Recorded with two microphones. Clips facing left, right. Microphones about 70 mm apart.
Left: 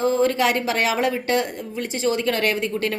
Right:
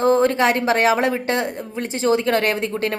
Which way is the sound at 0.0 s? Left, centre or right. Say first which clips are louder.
Right 3 dB; right.